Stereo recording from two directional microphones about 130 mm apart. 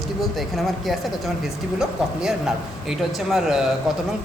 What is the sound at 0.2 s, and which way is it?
Speech, centre (ahead or behind).